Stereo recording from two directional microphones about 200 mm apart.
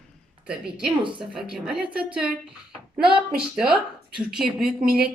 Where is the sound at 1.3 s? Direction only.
5° right (ahead or behind).